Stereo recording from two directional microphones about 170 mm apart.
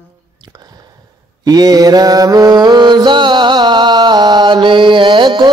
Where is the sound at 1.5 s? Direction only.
20° right (ahead or behind).